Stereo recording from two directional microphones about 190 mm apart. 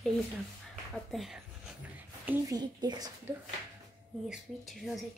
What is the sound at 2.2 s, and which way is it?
Speech, 15° right (ahead or behind).